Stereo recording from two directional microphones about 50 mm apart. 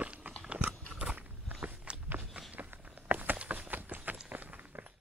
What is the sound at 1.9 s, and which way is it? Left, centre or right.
Walk, right.